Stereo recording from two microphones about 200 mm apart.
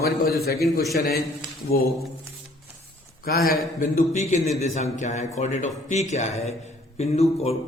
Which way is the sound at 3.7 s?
40° left (ahead or behind).